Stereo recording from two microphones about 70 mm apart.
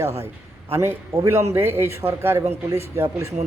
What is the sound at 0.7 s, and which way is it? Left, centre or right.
A man's voice, right.